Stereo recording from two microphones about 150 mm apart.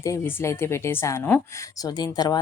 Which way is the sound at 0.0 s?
20° left (ahead or behind).